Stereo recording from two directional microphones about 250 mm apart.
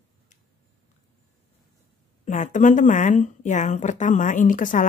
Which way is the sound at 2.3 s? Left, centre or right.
Left.